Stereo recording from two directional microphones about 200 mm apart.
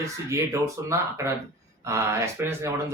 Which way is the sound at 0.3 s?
15° right (ahead or behind).